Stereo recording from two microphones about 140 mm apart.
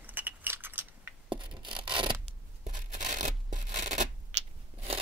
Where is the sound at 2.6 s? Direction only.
60° right (ahead or behind).